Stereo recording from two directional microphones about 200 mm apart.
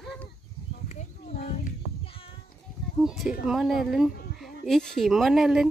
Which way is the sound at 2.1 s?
25° left (ahead or behind).